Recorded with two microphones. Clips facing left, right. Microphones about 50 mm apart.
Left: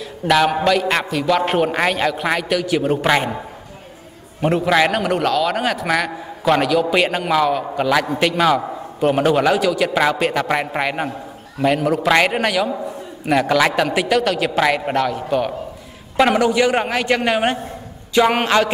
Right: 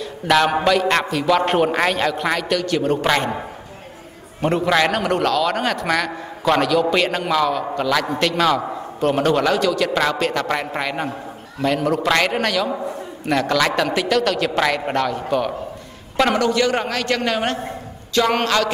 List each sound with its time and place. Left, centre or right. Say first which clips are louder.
0.0 s a sound: left 1 dB; centre
0.7 s a man's voice: even; centre
4.4 s a man's voice: left 2 dB; centre